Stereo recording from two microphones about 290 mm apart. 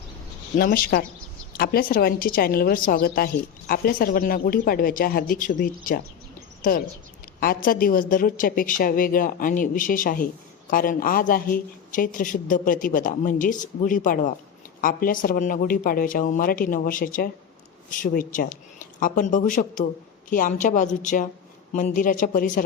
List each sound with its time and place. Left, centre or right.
0.5 s a woman's voice: left